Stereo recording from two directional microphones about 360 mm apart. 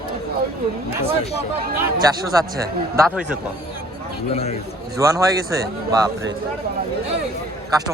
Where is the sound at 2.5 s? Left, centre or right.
Centre.